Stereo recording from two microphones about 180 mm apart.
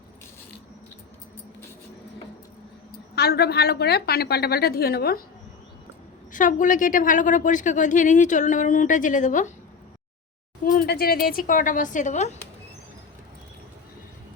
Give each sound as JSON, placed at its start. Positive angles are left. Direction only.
{"t": 3.2, "sound": "a woman's voice", "side_deg": 60}
{"t": 6.3, "sound": "a woman's voice", "side_deg": 45}
{"t": 10.7, "sound": "a woman's voice", "side_deg": 55}